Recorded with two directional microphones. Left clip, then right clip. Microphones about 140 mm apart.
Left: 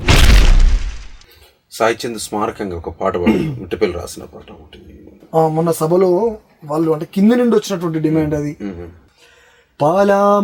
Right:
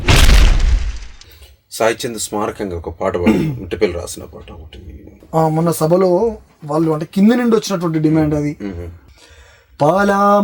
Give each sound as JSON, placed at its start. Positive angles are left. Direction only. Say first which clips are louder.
{"t": 0.0, "sound": "a sound", "louder": "even", "side_deg": 0}
{"t": 1.8, "sound": "speech", "louder": "even", "side_deg": 10}
{"t": 5.3, "sound": "speech", "louder": "left 1 dB", "side_deg": -35}
{"t": 9.7, "sound": "speech", "louder": "left 1 dB", "side_deg": -35}